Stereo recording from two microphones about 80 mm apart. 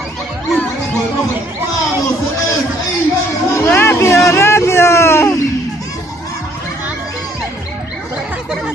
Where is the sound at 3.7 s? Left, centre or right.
Left.